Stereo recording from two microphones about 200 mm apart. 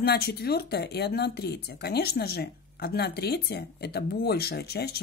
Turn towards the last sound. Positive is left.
turn(degrees=50)  # may be behind; listen again after turning